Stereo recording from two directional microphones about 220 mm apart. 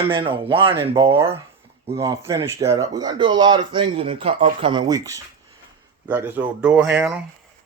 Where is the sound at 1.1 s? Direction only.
10° right (ahead or behind).